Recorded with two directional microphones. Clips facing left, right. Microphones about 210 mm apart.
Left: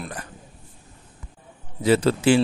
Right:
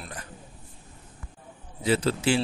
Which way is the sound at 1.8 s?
70° left (ahead or behind).